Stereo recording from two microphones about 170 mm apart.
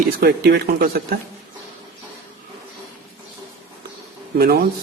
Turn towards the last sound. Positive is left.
turn(degrees=-65)  # may be behind; listen again after turning